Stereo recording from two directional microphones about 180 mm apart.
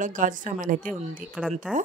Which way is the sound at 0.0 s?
45° right (ahead or behind).